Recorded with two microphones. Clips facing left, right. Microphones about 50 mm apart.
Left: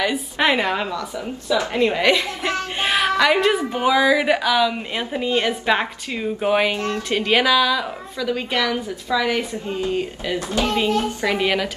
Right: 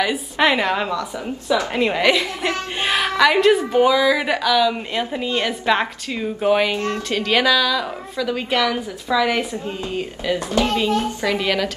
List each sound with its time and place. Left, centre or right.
0.0 s a woman's voice: centre
10.5 s a woman's voice: left
11.4 s a woman's voice: centre